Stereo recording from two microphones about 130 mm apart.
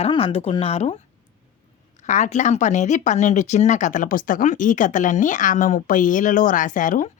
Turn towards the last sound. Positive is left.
turn(degrees=80)